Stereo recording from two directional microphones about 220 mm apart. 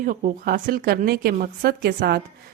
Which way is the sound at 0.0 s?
40° right (ahead or behind).